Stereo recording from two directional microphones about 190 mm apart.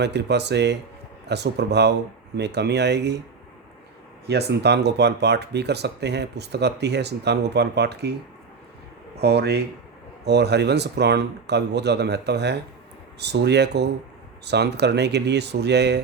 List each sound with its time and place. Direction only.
0.0 s speech: 60° right (ahead or behind)
4.3 s speech: 60° right (ahead or behind)
9.1 s speech: 60° right (ahead or behind)